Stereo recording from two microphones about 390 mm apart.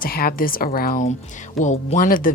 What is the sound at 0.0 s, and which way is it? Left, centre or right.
Speech, left.